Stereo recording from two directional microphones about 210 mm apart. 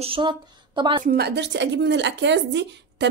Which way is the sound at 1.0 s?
50° right (ahead or behind).